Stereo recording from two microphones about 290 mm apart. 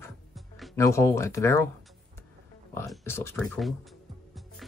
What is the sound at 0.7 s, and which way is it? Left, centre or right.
Speech, centre.